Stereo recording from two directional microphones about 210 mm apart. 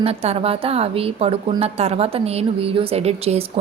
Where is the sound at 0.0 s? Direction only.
30° right (ahead or behind).